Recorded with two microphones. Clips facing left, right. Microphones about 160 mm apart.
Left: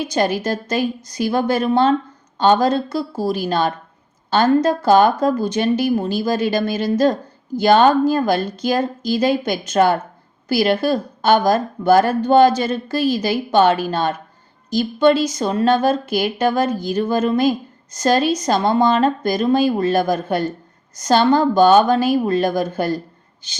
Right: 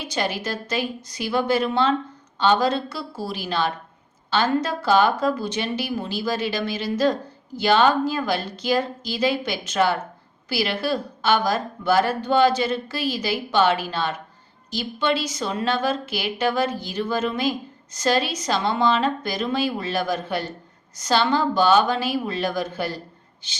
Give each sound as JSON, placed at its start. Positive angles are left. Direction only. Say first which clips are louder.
{"t": 0.0, "sound": "a woman's voice", "louder": "left 7 dB", "side_deg": 45}